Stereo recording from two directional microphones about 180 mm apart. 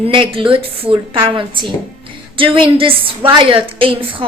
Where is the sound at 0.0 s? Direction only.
30° right (ahead or behind).